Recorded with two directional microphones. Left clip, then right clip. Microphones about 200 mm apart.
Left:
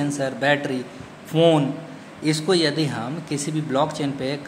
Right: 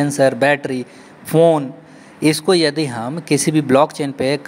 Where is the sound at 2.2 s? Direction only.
45° right (ahead or behind).